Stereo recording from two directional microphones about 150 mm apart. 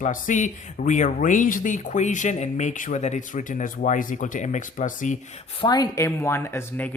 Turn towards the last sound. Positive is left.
turn(degrees=15)  # may be behind; listen again after turning